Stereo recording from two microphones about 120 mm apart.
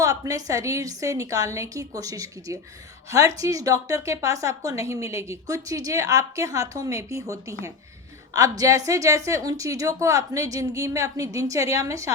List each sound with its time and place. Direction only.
0.0 s a woman's voice: 30° right (ahead or behind)